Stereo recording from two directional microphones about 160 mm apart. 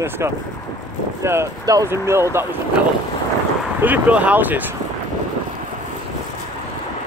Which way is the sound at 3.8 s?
10° right (ahead or behind).